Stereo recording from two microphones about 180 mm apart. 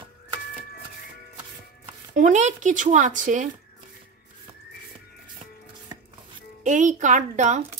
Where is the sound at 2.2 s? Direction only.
40° right (ahead or behind).